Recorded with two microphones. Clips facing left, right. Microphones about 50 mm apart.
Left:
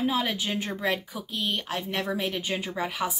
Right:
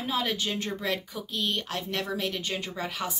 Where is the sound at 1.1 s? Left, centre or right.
Centre.